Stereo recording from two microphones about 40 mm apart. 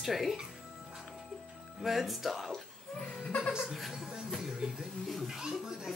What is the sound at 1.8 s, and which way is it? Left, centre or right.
Speech, centre.